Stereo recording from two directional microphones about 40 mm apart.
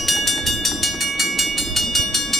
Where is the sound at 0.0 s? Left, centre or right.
Centre.